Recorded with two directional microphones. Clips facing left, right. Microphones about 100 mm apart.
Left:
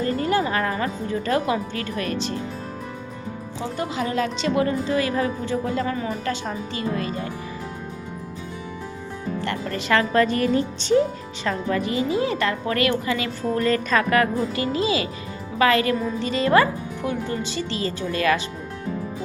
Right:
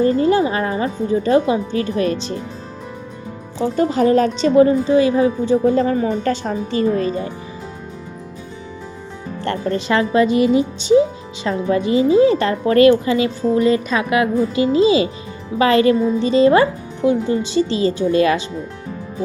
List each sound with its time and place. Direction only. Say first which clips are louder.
0.0 s speech: right 7 dB; 25° right (ahead or behind)
3.6 s a woman's voice: right 11 dB; 40° right (ahead or behind); by 5.7 s 20° right (ahead or behind)
5.7 s a woman's voice: right 8 dB; 35° right (ahead or behind)
9.4 s speech: right 10 dB; 30° right (ahead or behind); by 11.0 s 15° right (ahead or behind)
11.4 s a woman's voice: right 6 dB; 25° right (ahead or behind)